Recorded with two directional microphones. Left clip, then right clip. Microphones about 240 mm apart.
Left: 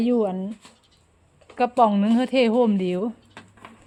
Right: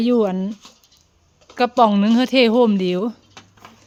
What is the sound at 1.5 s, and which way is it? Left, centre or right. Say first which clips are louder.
Speech: right 4 dB; centre.